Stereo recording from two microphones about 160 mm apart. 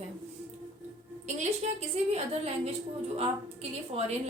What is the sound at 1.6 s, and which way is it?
A woman's voice, 45° right (ahead or behind).